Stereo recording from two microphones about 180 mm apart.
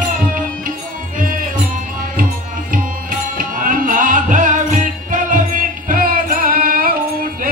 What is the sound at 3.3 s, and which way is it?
Music, 50° right (ahead or behind).